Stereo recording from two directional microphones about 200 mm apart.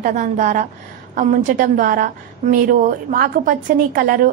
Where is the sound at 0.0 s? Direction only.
40° right (ahead or behind).